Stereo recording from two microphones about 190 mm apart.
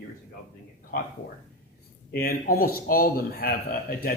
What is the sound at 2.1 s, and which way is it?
Speech, 50° left (ahead or behind).